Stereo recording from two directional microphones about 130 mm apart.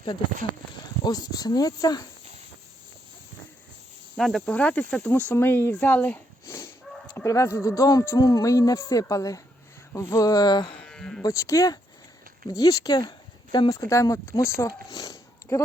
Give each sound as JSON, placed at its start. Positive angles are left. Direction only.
{"t": 1.0, "sound": "speech", "side_deg": 30}
{"t": 4.2, "sound": "speech", "side_deg": 5}
{"t": 10.8, "sound": "livestock", "side_deg": 5}
{"t": 11.2, "sound": "speech", "side_deg": 25}